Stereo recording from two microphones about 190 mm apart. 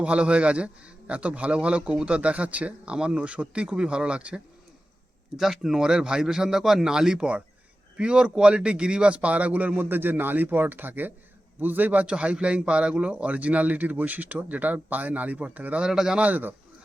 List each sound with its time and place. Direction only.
0.0 s a man's voice: 5° right (ahead or behind)
5.4 s a man's voice: centre (ahead or behind)